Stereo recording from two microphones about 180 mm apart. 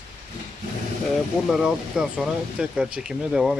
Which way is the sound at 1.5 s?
Centre (ahead or behind).